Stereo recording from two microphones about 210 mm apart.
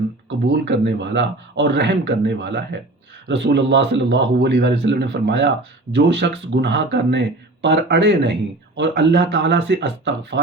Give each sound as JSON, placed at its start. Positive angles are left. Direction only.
{"t": 0.3, "sound": "speech", "side_deg": -55}